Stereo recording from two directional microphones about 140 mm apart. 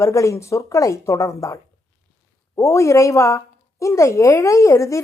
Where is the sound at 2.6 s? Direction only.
20° left (ahead or behind).